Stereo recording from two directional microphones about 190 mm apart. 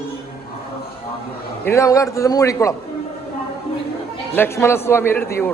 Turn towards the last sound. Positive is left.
turn(degrees=10)  # may be behind; listen again after turning